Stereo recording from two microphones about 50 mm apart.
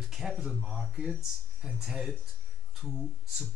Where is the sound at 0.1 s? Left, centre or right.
Centre.